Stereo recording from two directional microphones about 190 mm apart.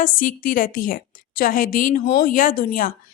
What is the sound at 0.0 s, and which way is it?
A woman's voice, 45° left (ahead or behind).